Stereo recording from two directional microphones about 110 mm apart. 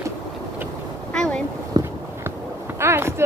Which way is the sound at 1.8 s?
40° right (ahead or behind).